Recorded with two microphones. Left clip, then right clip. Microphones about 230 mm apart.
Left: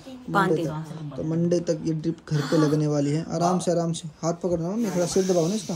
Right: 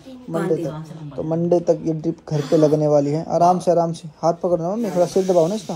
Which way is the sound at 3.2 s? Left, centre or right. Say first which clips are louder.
Right 9 dB; centre.